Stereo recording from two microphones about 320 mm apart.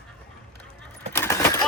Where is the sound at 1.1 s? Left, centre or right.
Centre.